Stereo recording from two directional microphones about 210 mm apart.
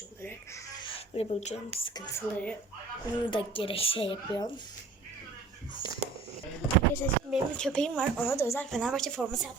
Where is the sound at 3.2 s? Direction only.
25° left (ahead or behind).